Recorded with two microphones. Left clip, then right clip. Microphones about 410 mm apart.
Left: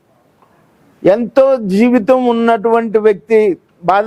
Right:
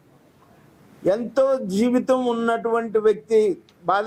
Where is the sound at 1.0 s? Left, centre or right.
Left.